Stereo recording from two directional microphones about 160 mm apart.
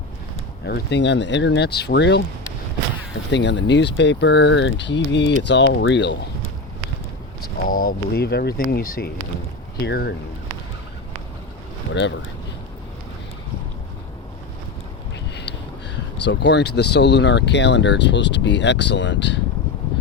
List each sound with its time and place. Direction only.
0.6 s speech: 90° left
3.2 s speech: 90° left
7.7 s speech: 65° left (ahead or behind)
9.8 s speech: 90° left
16.2 s speech: 90° left